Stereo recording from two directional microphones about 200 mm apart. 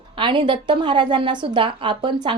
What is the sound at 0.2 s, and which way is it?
Speech, 25° right (ahead or behind).